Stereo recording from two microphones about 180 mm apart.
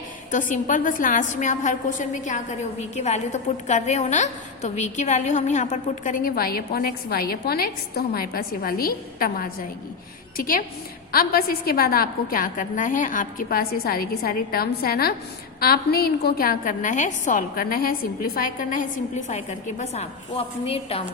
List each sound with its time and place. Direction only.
0.3 s a woman's voice: 45° left (ahead or behind)